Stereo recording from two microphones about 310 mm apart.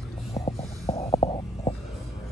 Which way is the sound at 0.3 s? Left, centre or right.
Centre.